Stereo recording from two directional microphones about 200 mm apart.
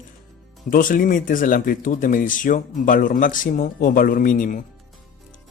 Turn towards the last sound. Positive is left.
turn(degrees=45)  # may be behind; listen again after turning